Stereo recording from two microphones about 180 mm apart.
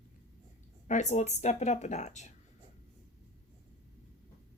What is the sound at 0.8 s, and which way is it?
Speech, 40° left (ahead or behind).